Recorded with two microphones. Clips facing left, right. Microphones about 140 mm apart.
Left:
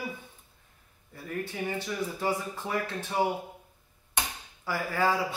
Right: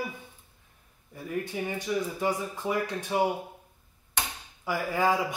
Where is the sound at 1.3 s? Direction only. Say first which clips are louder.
Right 1 dB; 15° right (ahead or behind).